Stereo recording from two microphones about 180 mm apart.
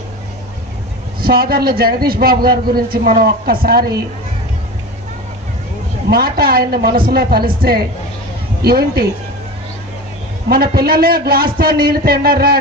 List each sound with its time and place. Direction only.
1.2 s a man's voice: 55° right (ahead or behind)
6.1 s a man's voice: 60° right (ahead or behind)
10.5 s a man's voice: 60° right (ahead or behind)